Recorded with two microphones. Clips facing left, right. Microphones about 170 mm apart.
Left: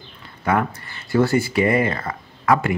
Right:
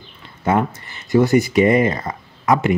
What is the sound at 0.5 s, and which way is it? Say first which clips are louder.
Speech: right 2 dB; 20° right (ahead or behind).